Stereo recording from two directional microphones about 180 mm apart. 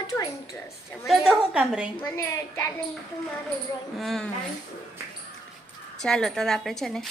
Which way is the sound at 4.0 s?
Centre (ahead or behind).